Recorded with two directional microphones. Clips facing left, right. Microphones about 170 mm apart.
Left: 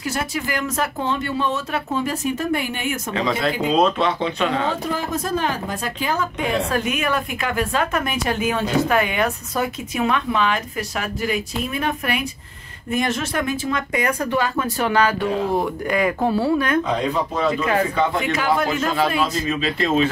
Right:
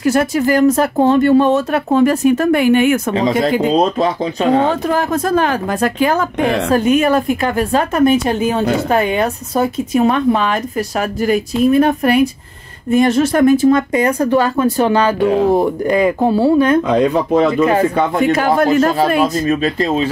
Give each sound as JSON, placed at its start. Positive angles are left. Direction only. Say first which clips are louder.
{"t": 0.0, "sound": "speech", "louder": "right 12 dB", "side_deg": -50}
{"t": 3.1, "sound": "speech", "louder": "right 8 dB", "side_deg": -35}
{"t": 4.8, "sound": "a woman's voice", "louder": "right 8 dB", "side_deg": -60}
{"t": 6.7, "sound": "a woman's voice", "louder": "right 10 dB", "side_deg": -35}
{"t": 17.1, "sound": "a woman's voice", "louder": "right 9 dB", "side_deg": -60}
{"t": 17.9, "sound": "speech", "louder": "right 7 dB", "side_deg": -45}